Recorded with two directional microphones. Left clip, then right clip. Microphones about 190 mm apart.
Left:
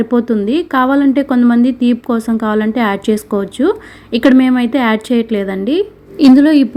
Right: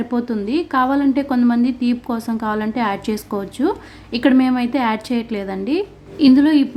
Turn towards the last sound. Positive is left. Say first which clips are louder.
# left 5 dB
turn(degrees=30)  # may be behind; listen again after turning